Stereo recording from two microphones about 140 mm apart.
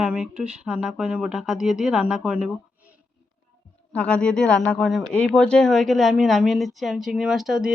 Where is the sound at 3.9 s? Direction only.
10° left (ahead or behind).